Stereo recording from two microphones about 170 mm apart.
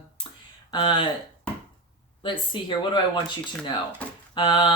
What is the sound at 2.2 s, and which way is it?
Speech, 30° left (ahead or behind).